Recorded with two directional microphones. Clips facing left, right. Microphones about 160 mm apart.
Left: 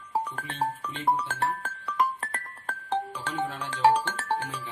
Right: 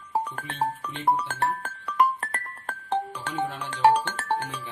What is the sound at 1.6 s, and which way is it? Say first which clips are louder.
Music: right 4 dB; 55° right (ahead or behind).